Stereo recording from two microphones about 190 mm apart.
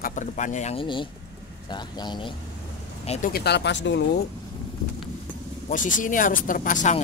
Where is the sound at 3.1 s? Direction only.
45° left (ahead or behind); by 4.2 s 70° left (ahead or behind).